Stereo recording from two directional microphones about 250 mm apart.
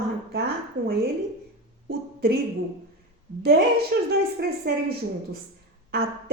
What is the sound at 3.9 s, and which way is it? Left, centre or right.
Speech, right.